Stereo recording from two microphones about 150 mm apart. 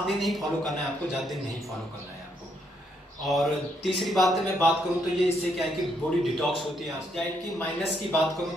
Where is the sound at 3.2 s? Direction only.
Centre (ahead or behind).